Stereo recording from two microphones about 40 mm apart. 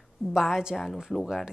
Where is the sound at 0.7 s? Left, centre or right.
Centre.